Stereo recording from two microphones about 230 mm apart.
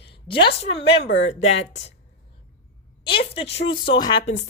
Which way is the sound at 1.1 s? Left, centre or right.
Left.